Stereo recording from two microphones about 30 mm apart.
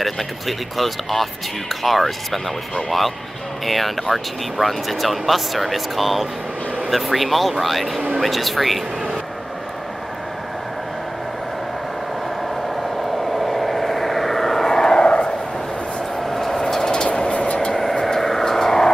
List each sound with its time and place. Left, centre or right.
0.0 s speech: centre
3.6 s speech: centre
13.3 s vehicle: centre
15.0 s a sound: left
16.3 s vehicle: centre; by 17.6 s left
17.7 s vehicle: centre